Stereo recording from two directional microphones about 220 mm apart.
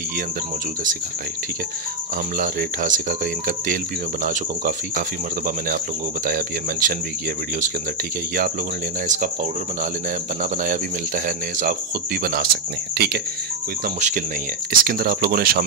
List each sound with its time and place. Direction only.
2.3 s speech: 35° right (ahead or behind)
6.2 s speech: 35° right (ahead or behind)
9.0 s speech: 35° right (ahead or behind)
12.2 s speech: 45° right (ahead or behind)
13.8 s speech: 35° right (ahead or behind)